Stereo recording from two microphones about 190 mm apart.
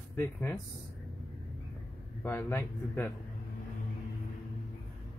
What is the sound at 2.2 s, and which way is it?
Speech, 10° left (ahead or behind).